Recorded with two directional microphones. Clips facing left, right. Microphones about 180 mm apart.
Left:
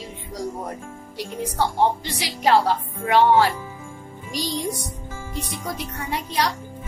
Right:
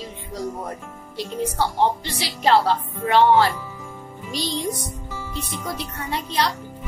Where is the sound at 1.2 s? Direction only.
10° left (ahead or behind).